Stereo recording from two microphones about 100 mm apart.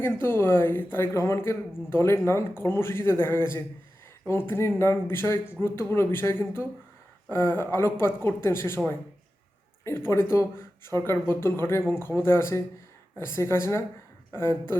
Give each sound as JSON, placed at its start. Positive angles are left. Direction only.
{"t": 0.0, "sound": "speech", "side_deg": 25}
{"t": 9.8, "sound": "speech", "side_deg": 25}